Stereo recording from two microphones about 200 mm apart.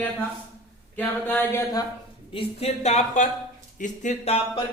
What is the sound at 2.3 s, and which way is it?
Speech, 30° left (ahead or behind).